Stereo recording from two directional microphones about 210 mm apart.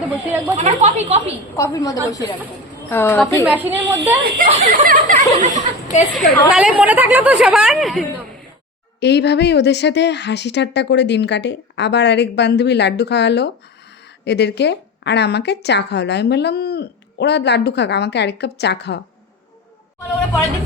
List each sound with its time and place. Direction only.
0.5 s speech: 30° right (ahead or behind)
1.5 s a woman's voice: 15° left (ahead or behind)
3.4 s speech: 10° right (ahead or behind)
4.4 s speech: 40° right (ahead or behind)
6.1 s speech: 5° right (ahead or behind)
9.0 s speech: 55° left (ahead or behind)